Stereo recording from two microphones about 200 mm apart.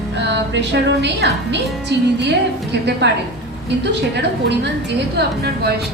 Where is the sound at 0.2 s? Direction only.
60° right (ahead or behind).